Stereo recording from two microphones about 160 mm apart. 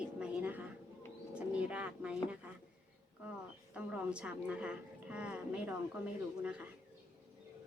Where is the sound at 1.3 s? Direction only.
10° right (ahead or behind).